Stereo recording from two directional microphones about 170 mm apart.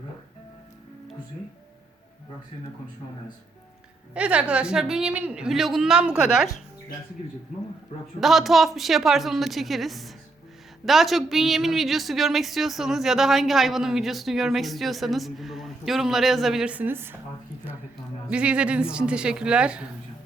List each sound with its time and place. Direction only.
4.1 s speech: 5° right (ahead or behind)
8.2 s speech: centre (ahead or behind)
18.3 s speech: 5° right (ahead or behind)